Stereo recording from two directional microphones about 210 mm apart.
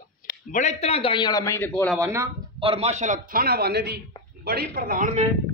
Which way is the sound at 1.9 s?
15° right (ahead or behind).